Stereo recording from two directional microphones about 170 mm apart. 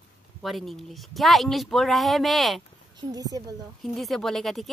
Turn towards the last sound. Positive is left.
turn(degrees=0)  # may be behind; listen again after turning